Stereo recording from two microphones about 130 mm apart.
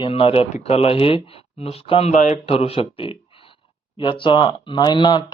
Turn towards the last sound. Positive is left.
turn(degrees=35)  # may be behind; listen again after turning